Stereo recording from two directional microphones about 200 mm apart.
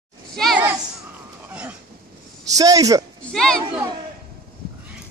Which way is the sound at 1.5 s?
5° right (ahead or behind).